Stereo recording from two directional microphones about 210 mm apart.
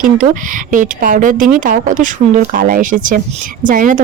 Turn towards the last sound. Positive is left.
turn(degrees=-40)  # may be behind; listen again after turning